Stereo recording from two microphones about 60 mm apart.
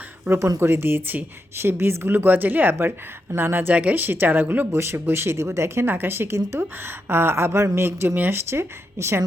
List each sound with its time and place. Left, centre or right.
0.6 s speech: right
3.8 s speech: right
4.0 s speech: right
4.7 s speech: right